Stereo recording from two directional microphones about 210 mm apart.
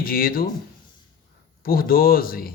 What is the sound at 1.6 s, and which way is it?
Speech, 45° left (ahead or behind).